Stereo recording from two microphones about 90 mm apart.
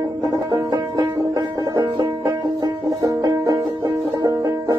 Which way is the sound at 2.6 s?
45° right (ahead or behind).